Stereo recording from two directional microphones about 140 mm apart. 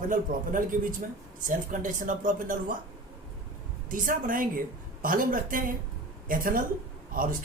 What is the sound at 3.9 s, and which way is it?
Speech, 80° right.